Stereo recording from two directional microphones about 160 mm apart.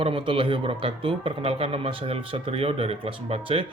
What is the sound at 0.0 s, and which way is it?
Speech, 35° right (ahead or behind).